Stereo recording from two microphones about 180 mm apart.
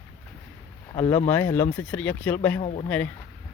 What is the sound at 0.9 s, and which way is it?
Speech, 10° left (ahead or behind).